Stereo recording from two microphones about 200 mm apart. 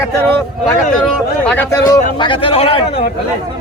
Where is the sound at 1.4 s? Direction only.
10° left (ahead or behind); by 2.8 s 30° left (ahead or behind).